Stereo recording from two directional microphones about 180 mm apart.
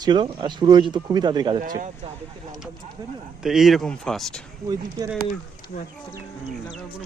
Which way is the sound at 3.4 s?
Centre (ahead or behind).